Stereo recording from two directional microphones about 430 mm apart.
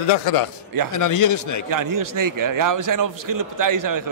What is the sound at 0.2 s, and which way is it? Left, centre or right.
A man's voice, left.